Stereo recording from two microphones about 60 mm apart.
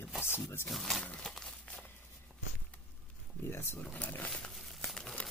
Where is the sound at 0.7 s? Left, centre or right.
Centre.